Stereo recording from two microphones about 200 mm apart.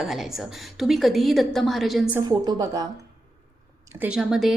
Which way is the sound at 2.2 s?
20° right (ahead or behind).